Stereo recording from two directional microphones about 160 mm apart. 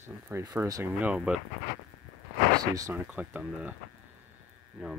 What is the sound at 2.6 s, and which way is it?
Speech, 20° right (ahead or behind).